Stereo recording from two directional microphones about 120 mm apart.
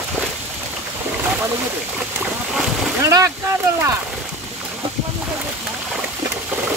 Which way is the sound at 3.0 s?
25° right (ahead or behind).